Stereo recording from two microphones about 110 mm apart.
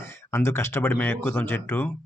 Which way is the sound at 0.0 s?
25° left (ahead or behind).